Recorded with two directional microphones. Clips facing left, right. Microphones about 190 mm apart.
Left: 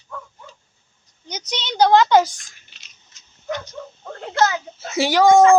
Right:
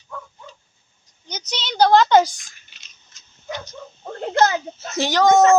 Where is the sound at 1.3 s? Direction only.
Centre (ahead or behind).